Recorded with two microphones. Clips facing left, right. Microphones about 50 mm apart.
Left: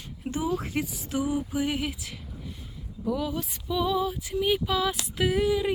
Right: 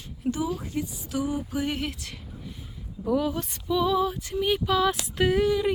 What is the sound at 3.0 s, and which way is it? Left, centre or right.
Speech, centre.